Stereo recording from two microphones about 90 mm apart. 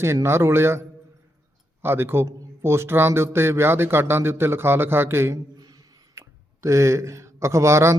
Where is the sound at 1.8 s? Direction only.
25° right (ahead or behind).